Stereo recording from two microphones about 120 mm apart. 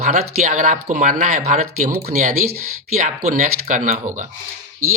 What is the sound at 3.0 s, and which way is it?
Speech, 90° right.